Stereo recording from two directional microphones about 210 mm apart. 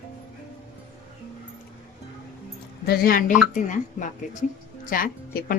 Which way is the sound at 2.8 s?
45° left (ahead or behind).